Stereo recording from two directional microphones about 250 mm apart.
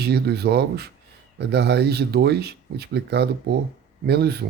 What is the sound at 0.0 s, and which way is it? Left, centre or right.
Speech, right.